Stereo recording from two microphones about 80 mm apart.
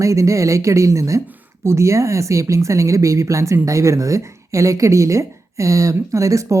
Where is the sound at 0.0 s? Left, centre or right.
Right.